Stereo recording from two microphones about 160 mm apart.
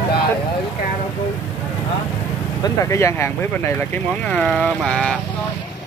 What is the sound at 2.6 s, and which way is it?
Speech, 20° left (ahead or behind).